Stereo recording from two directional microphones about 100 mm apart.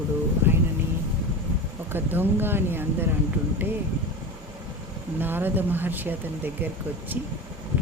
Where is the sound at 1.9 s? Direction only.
20° right (ahead or behind).